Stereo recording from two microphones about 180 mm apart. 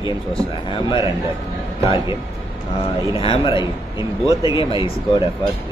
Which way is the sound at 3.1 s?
30° left (ahead or behind).